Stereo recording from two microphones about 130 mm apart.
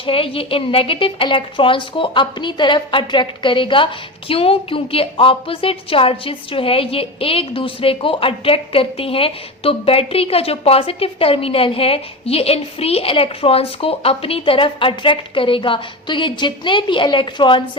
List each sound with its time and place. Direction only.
0.0 s a woman's voice: 45° left (ahead or behind)